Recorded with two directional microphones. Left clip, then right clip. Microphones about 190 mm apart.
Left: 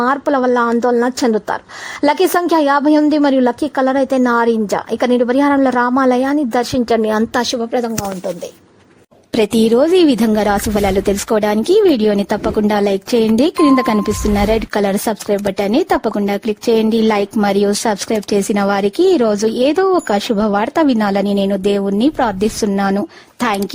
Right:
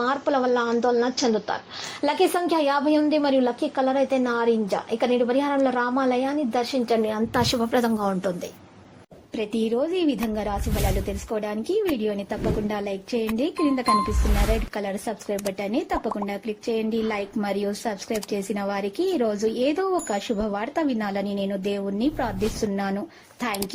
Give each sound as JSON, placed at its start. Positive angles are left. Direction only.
{"t": 0.0, "sound": "a woman's voice", "side_deg": 50}
{"t": 7.3, "sound": "a woman's voice", "side_deg": 15}
{"t": 9.3, "sound": "speech", "side_deg": 70}